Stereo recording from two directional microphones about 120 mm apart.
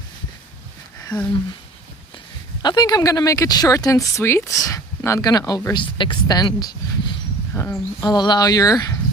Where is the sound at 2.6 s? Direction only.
35° left (ahead or behind).